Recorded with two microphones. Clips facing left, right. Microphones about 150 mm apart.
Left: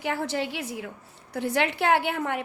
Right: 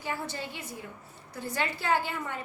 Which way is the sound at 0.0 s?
75° left (ahead or behind).